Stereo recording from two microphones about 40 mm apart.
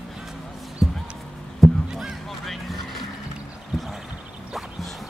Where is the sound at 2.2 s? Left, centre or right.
Centre.